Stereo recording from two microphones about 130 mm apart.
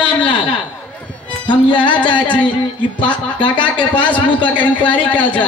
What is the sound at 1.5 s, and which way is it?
Speech, 40° left (ahead or behind).